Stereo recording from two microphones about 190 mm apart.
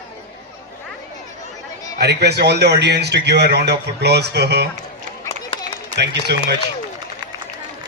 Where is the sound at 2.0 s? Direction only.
60° right (ahead or behind).